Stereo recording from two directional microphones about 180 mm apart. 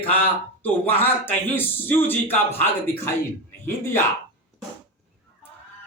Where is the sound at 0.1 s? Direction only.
10° left (ahead or behind).